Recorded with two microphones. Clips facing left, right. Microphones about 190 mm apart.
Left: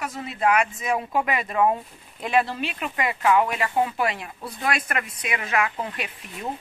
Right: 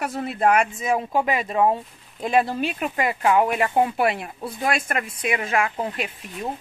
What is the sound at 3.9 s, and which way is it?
Speech, 55° right (ahead or behind).